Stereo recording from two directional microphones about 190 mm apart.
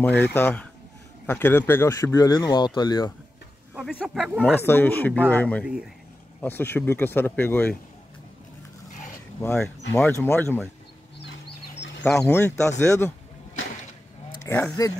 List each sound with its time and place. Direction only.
0.0 s speech: 10° left (ahead or behind)
3.7 s speech: 5° right (ahead or behind)
4.6 s speech: 10° left (ahead or behind)
9.4 s speech: 10° left (ahead or behind)
11.1 s a sound: 65° left (ahead or behind)
12.0 s speech: centre (ahead or behind)
12.3 s speech: 15° left (ahead or behind)
14.4 s speech: 15° left (ahead or behind)